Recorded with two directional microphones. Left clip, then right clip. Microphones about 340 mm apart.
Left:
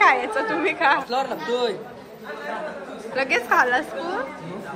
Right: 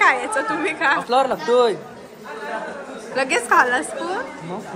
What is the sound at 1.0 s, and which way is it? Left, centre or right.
Speech, right.